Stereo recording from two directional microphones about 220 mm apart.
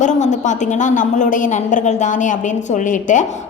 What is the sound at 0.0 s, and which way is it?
A woman's voice, 35° left (ahead or behind).